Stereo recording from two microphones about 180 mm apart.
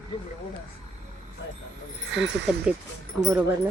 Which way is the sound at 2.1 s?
85° right.